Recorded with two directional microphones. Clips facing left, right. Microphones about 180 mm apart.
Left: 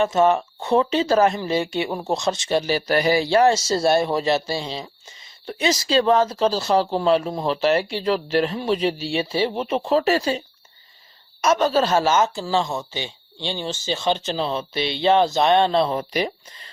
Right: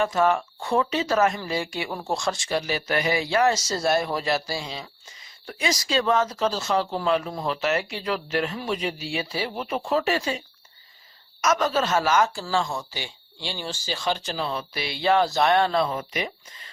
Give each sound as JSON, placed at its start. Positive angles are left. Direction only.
{"t": 0.0, "sound": "speech", "side_deg": 25}